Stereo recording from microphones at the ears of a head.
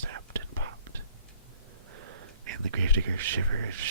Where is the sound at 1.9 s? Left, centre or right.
Right.